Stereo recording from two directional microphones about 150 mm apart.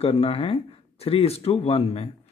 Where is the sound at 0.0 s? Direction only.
40° left (ahead or behind).